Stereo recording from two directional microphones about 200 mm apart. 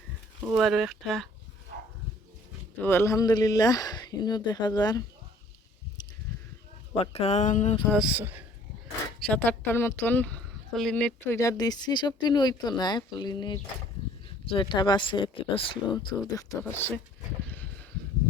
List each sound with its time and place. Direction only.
0.4 s speech: centre (ahead or behind)
2.8 s speech: 10° left (ahead or behind)
7.0 s speech: 30° left (ahead or behind)
7.9 s speech: 5° right (ahead or behind)
9.2 s speech: 5° left (ahead or behind)
17.4 s a sound: 10° left (ahead or behind)